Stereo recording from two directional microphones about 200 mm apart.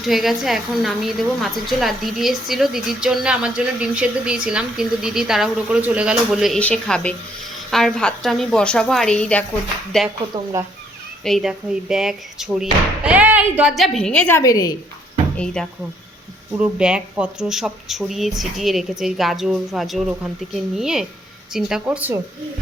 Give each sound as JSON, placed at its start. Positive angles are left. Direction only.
{"t": 0.0, "sound": "a woman's voice", "side_deg": 0}
{"t": 10.3, "sound": "speech", "side_deg": -25}
{"t": 11.2, "sound": "a woman's voice", "side_deg": 0}
{"t": 15.6, "sound": "a woman's voice", "side_deg": 5}